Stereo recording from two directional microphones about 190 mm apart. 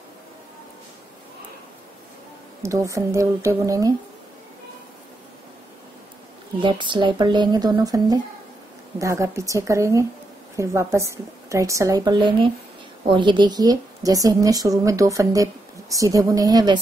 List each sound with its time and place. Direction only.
2.6 s a woman's voice: 15° right (ahead or behind)
6.6 s a woman's voice: 25° right (ahead or behind)